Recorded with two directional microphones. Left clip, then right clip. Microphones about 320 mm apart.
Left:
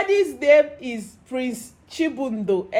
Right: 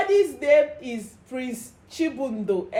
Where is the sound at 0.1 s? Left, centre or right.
Left.